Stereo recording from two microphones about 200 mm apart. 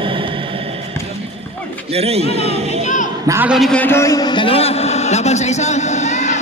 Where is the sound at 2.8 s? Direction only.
40° left (ahead or behind).